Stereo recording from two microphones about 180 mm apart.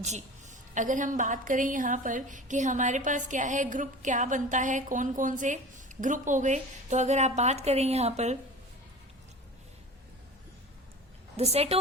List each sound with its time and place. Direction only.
0.0 s a woman's voice: 40° right (ahead or behind)
11.3 s a woman's voice: 35° right (ahead or behind)